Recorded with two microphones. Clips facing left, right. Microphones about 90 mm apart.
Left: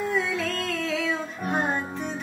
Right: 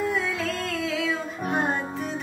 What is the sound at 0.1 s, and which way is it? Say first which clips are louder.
Music: left 1 dB; centre (ahead or behind).